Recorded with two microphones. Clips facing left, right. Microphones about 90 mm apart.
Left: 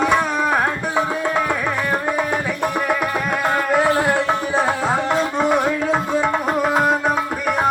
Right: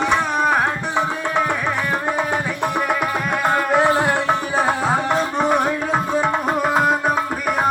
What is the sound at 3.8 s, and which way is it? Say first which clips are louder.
Tabla: even; 20° right (ahead or behind).